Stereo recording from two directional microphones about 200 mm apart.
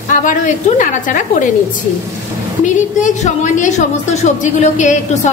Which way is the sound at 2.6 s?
35° left (ahead or behind).